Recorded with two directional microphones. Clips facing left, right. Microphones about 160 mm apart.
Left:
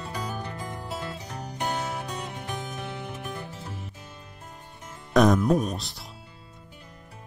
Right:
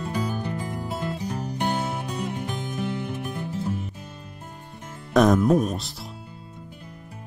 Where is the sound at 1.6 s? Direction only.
25° right (ahead or behind).